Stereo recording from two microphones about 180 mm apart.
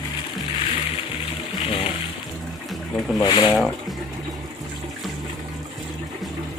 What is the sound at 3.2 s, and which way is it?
Speech, 25° left (ahead or behind).